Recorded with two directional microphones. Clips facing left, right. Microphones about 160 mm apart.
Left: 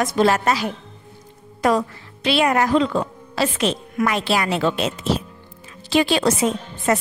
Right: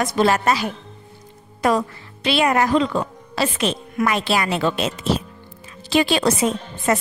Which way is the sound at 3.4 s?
90° left.